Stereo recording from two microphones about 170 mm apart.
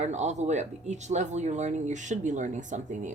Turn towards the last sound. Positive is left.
turn(degrees=-45)  # may be behind; listen again after turning